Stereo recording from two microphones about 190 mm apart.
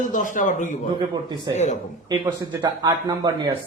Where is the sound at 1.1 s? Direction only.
20° right (ahead or behind).